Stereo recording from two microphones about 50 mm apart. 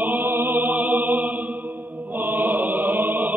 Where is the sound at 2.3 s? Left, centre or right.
Right.